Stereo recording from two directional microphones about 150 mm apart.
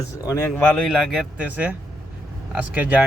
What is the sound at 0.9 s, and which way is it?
Speech, 5° right (ahead or behind).